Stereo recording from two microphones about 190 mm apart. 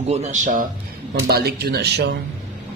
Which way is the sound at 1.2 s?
55° right (ahead or behind).